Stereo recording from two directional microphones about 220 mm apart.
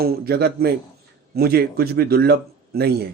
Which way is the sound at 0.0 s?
45° right (ahead or behind).